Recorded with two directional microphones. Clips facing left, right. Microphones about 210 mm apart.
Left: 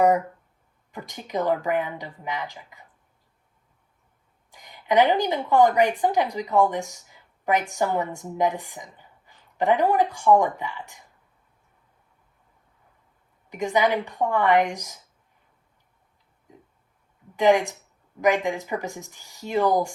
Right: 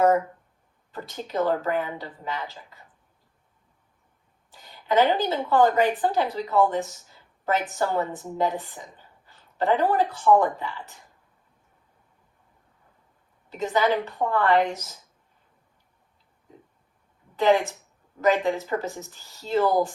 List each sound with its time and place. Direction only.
0.9 s a woman's voice: 15° left (ahead or behind)
4.5 s a woman's voice: 15° left (ahead or behind)
13.5 s a woman's voice: 15° left (ahead or behind)
17.3 s a woman's voice: 15° left (ahead or behind)